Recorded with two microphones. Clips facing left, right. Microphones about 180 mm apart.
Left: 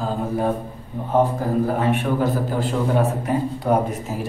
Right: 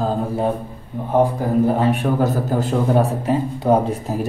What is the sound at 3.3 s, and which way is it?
Speech, 25° right (ahead or behind).